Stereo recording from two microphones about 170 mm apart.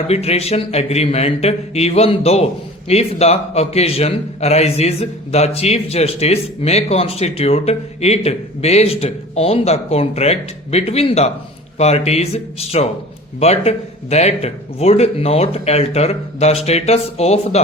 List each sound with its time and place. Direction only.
0.1 s speech: 35° left (ahead or behind)